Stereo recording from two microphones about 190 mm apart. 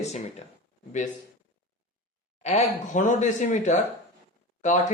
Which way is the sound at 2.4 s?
40° left (ahead or behind).